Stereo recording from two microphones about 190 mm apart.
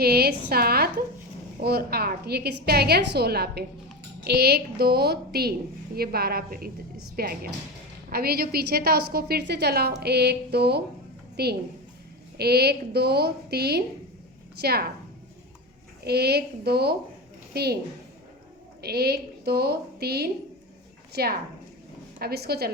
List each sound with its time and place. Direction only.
0.0 s a woman's voice: 55° right (ahead or behind)
16.0 s a woman's voice: 55° right (ahead or behind)
18.8 s a woman's voice: 55° right (ahead or behind)